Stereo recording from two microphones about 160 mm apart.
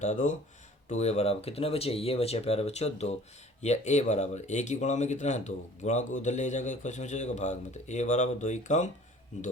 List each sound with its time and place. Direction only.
0.0 s speech: 50° left (ahead or behind)